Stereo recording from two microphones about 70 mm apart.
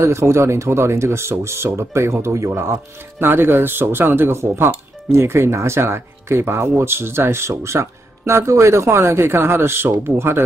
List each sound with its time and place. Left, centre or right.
0.0 s speech: right